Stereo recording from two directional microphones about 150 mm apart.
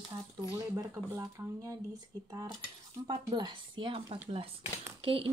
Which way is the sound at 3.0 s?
30° right (ahead or behind).